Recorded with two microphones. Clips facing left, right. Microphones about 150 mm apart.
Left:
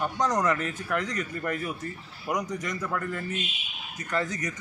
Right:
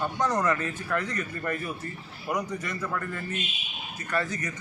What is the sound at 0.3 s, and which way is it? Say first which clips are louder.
Speech: even; 15° left (ahead or behind).